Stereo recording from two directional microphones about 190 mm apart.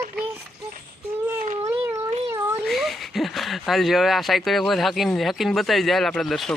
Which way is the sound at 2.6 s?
Centre (ahead or behind).